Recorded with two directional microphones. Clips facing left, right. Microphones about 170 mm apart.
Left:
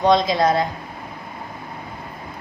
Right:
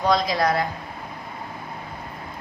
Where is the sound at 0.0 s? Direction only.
20° left (ahead or behind).